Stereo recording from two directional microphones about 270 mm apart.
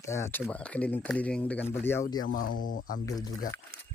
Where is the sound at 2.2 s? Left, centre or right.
Left.